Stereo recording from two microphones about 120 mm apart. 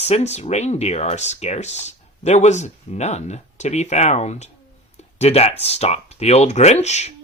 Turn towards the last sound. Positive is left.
turn(degrees=70)  # may be behind; listen again after turning